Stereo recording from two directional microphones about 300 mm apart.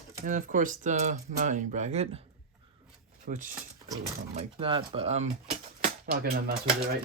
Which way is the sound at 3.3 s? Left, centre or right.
Right.